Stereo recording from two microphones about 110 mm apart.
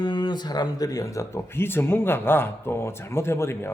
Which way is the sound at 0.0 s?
45° left (ahead or behind).